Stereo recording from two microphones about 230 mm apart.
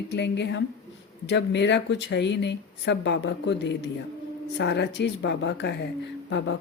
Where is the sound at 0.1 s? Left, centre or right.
Left.